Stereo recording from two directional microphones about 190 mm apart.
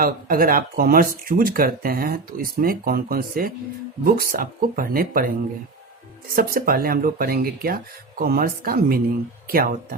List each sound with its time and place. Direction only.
0.0 s speech: 50° right (ahead or behind)
6.3 s speech: 50° right (ahead or behind)